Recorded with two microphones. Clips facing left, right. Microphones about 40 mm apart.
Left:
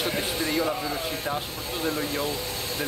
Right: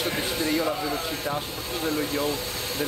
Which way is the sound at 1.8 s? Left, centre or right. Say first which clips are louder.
Right 1 dB; centre.